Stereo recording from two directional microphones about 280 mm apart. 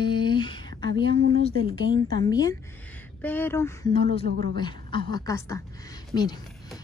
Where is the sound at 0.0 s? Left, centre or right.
Centre.